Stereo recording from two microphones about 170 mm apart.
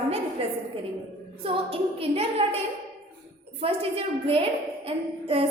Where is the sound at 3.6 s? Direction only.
35° right (ahead or behind).